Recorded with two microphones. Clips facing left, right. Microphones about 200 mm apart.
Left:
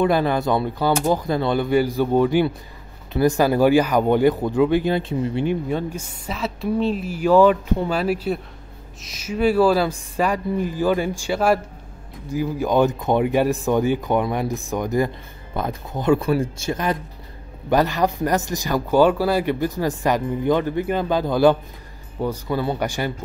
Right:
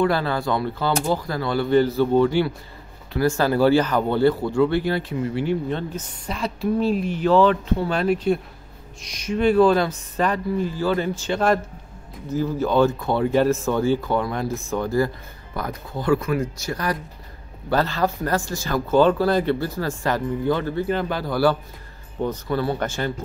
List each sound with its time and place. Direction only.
0.0 s speech: 20° left (ahead or behind)